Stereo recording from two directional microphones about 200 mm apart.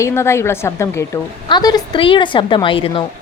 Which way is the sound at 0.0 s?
15° left (ahead or behind).